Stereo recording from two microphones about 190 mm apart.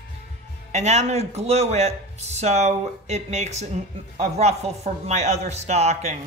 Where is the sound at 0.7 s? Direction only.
35° right (ahead or behind).